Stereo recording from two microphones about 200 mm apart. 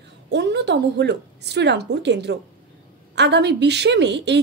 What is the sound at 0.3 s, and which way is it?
A woman's voice, 60° right (ahead or behind).